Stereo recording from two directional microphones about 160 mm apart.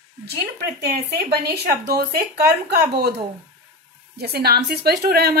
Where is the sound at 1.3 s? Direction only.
80° right.